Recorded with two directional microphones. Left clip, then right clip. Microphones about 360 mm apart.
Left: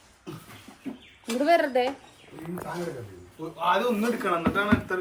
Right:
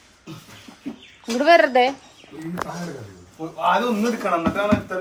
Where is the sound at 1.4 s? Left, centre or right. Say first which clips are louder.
Right 8 dB; right.